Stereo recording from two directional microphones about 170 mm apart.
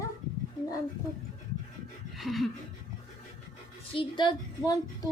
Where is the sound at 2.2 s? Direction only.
Centre (ahead or behind).